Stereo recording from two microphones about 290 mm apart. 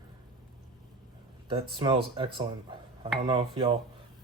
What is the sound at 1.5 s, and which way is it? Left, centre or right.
Speech, centre.